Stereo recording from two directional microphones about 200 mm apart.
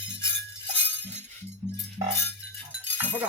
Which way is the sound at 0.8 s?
10° left (ahead or behind).